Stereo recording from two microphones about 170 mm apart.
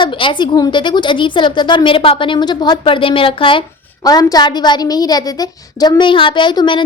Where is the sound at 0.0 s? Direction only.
30° left (ahead or behind).